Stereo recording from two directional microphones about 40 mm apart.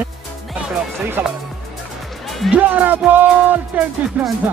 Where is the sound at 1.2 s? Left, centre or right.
Right.